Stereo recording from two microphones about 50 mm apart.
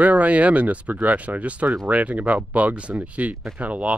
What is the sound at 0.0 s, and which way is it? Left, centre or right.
Speech, right.